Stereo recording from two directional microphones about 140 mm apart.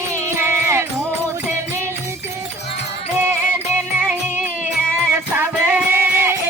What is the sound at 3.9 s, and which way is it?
Music, 10° right (ahead or behind).